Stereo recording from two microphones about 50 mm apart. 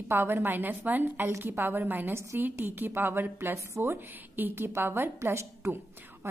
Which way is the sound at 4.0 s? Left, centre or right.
Right.